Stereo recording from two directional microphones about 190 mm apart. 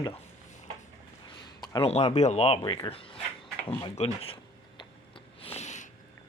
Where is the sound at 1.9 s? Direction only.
35° left (ahead or behind).